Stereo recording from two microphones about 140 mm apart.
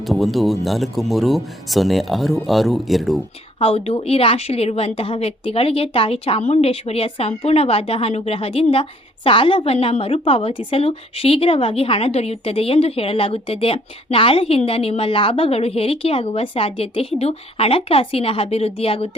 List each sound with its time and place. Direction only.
0.0 s speech: centre (ahead or behind)
3.6 s a woman's voice: 45° left (ahead or behind)